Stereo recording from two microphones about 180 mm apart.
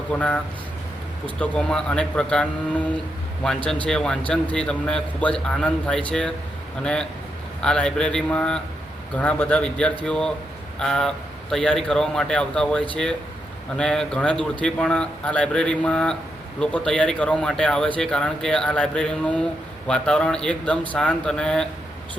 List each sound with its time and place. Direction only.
0.1 s speech: 5° left (ahead or behind)
1.4 s speech: 5° left (ahead or behind)